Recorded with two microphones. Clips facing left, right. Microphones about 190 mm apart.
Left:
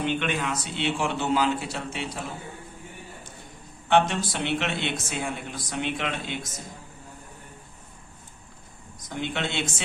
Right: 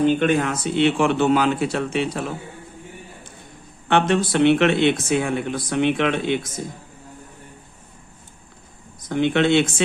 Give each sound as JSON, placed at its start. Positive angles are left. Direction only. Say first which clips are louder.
{"t": 0.0, "sound": "speech", "louder": "right 9 dB", "side_deg": -40}
{"t": 3.8, "sound": "speech", "louder": "right 4 dB", "side_deg": -60}
{"t": 9.0, "sound": "speech", "louder": "right 12 dB", "side_deg": -65}